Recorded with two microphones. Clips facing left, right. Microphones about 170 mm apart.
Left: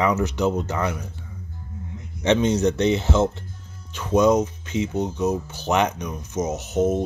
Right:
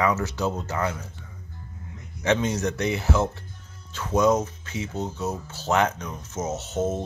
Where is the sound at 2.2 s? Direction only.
20° left (ahead or behind).